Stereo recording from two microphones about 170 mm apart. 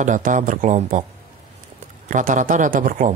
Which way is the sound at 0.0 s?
50° right (ahead or behind).